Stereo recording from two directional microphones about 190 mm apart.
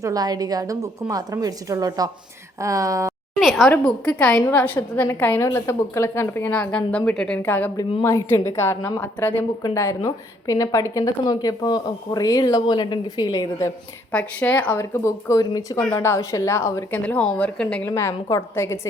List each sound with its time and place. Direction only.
0.0 s a woman's voice: 20° right (ahead or behind)
3.4 s a woman's voice: centre (ahead or behind)